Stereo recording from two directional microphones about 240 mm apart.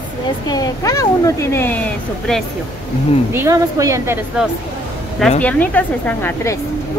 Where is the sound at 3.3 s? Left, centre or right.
Centre.